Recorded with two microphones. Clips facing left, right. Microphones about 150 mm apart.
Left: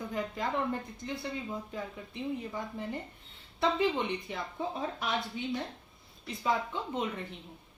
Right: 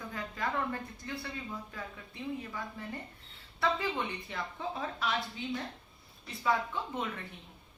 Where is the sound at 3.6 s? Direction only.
20° left (ahead or behind).